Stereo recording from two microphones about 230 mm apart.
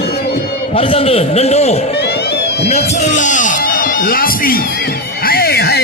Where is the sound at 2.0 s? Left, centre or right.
Left.